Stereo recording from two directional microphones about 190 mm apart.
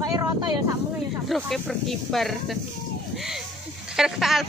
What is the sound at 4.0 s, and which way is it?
Speech, centre (ahead or behind).